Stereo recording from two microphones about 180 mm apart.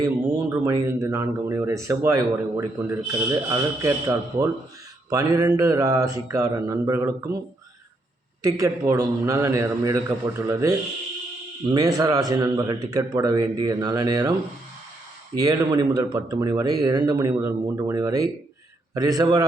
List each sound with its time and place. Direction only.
0.0 s speech: 20° right (ahead or behind)
8.4 s a man's voice: 15° right (ahead or behind)
15.4 s a man's voice: 20° right (ahead or behind)